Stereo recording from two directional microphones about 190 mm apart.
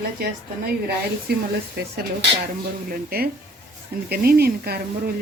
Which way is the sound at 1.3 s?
55° right (ahead or behind).